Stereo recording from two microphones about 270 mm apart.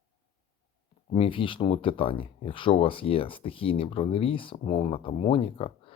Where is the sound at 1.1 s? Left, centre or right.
Centre.